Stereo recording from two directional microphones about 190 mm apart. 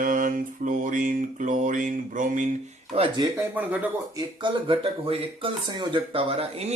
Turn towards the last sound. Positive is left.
turn(degrees=-30)  # may be behind; listen again after turning